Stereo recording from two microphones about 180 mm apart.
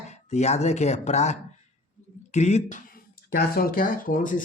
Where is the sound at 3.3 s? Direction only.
55° left (ahead or behind).